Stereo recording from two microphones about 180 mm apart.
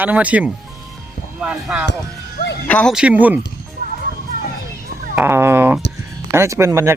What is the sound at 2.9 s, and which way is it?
Speech, 5° right (ahead or behind).